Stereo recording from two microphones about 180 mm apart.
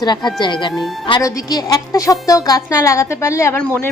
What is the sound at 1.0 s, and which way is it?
A woman's voice, 20° left (ahead or behind).